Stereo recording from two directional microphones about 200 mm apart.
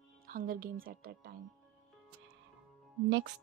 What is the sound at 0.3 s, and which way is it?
A woman's voice, 45° right (ahead or behind).